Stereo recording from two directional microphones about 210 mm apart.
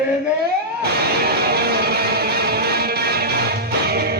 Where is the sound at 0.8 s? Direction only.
50° right (ahead or behind).